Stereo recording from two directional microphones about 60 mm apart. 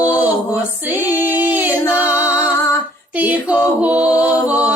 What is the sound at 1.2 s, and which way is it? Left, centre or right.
Music, right.